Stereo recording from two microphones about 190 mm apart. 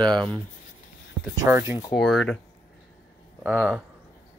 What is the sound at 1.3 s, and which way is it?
Speech, 15° right (ahead or behind).